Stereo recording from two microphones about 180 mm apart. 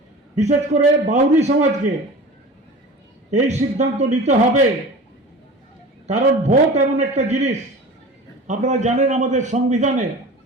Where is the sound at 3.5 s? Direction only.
40° right (ahead or behind).